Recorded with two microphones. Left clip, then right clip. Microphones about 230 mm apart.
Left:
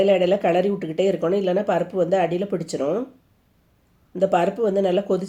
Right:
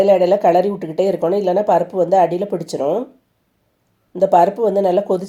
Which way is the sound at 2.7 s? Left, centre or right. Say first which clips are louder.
Right 5 dB; right.